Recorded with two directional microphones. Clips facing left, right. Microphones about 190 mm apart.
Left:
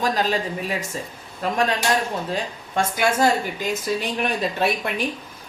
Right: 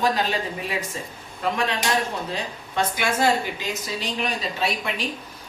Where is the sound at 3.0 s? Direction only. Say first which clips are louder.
Left 3 dB; 45° left (ahead or behind).